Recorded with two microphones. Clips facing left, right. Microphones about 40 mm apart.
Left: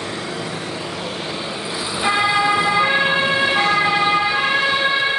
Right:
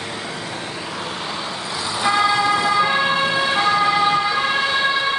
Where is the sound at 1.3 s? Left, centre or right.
Centre.